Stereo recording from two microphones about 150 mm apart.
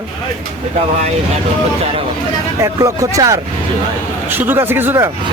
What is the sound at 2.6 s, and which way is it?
Speech, 20° right (ahead or behind).